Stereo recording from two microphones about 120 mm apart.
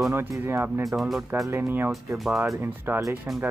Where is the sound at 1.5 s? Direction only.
20° right (ahead or behind).